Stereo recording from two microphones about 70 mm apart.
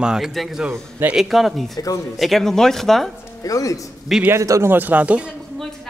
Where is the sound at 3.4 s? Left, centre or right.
Left.